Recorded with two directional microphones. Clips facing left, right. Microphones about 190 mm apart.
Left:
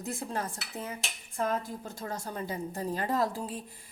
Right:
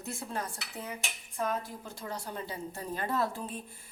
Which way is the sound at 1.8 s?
45° left (ahead or behind).